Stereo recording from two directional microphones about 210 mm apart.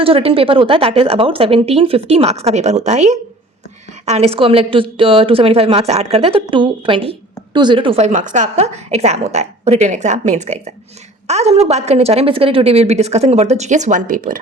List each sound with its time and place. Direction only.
0.0 s a woman's voice: 25° right (ahead or behind)